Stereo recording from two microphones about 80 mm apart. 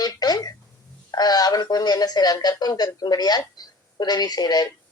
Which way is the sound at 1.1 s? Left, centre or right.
Left.